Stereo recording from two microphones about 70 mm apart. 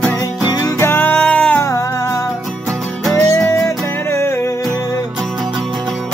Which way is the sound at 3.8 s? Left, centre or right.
Left.